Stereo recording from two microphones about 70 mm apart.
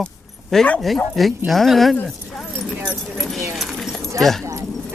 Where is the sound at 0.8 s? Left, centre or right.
Centre.